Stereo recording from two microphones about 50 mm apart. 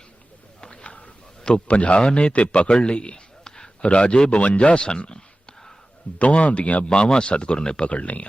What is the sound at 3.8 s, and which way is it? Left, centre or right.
Speech, left.